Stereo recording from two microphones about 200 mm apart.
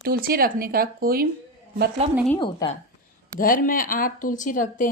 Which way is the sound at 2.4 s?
20° left (ahead or behind).